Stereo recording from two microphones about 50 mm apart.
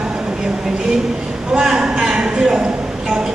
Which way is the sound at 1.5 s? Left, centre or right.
Centre.